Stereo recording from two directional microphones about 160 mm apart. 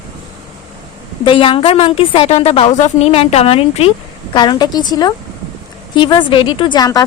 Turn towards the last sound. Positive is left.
turn(degrees=25)  # may be behind; listen again after turning